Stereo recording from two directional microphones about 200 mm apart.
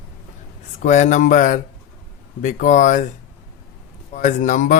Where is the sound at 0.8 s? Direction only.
35° left (ahead or behind).